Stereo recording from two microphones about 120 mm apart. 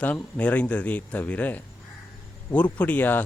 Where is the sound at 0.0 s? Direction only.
15° left (ahead or behind).